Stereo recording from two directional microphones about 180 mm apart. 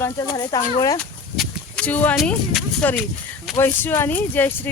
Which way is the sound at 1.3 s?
Centre (ahead or behind).